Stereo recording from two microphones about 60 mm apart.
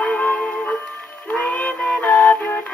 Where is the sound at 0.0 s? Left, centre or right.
Centre.